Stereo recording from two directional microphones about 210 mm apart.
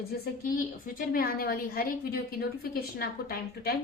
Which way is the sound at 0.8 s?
40° left (ahead or behind).